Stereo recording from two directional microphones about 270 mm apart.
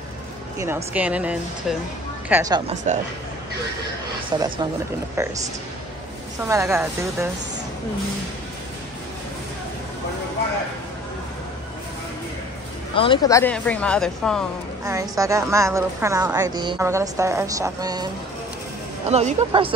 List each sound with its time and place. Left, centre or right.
0.6 s a woman's voice: centre
2.7 s speech: right
4.3 s a woman's voice: centre
6.4 s a woman's voice: centre
12.9 s speech: centre
14.9 s a woman's voice: centre